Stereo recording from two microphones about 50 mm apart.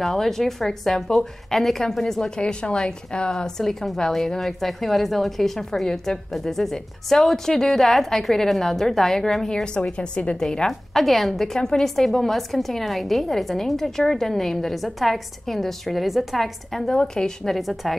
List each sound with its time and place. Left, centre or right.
0.0 s a woman's voice: centre
9.8 s a woman's voice: left
10.4 s a woman's voice: centre
17.6 s a woman's voice: centre